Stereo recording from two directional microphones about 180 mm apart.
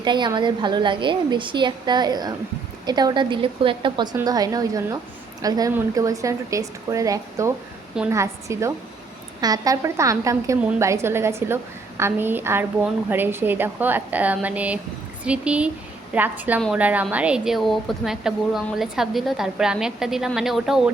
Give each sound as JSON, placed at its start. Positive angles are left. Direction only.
{"t": 0.0, "sound": "a woman's voice", "side_deg": -25}